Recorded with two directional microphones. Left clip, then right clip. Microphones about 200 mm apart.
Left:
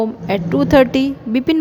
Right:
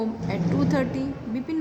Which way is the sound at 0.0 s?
40° left (ahead or behind).